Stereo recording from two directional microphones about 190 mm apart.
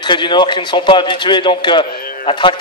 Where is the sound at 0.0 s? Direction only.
25° left (ahead or behind).